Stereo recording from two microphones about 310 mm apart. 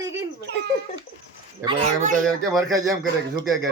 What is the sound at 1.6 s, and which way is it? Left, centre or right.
Speech, centre.